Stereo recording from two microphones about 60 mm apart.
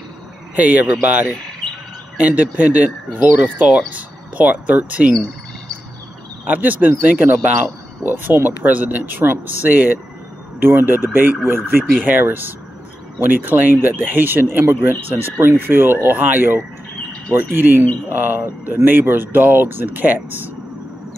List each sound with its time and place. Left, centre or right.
0.6 s speech: right
2.1 s speech: right
6.4 s speech: right